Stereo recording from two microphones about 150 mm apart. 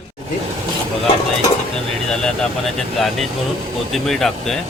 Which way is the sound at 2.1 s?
5° left (ahead or behind).